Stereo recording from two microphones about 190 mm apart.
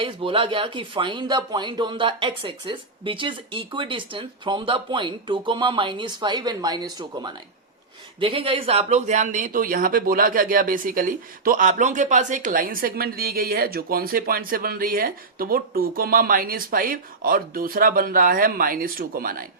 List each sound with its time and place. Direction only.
0.0 s speech: 25° right (ahead or behind); by 19.5 s 50° right (ahead or behind)